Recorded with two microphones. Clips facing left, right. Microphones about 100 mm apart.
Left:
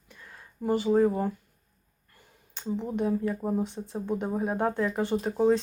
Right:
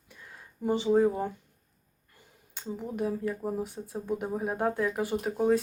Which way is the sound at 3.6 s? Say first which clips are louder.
Left 3 dB; 10° right (ahead or behind).